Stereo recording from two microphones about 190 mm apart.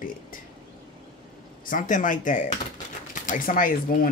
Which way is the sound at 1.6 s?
45° left (ahead or behind).